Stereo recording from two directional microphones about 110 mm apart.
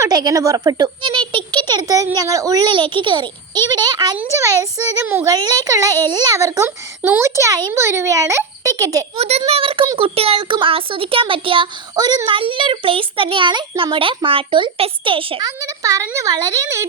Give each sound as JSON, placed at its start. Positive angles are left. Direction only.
{"t": 0.0, "sound": "a child's voice", "side_deg": -35}
{"t": 2.7, "sound": "a child's voice", "side_deg": -50}
{"t": 9.1, "sound": "a child's voice", "side_deg": -75}
{"t": 9.5, "sound": "a child's voice", "side_deg": -55}
{"t": 11.9, "sound": "a child's voice", "side_deg": -35}
{"t": 15.4, "sound": "a child's voice", "side_deg": -35}